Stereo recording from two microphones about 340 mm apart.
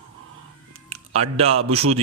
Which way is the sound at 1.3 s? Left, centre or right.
Centre.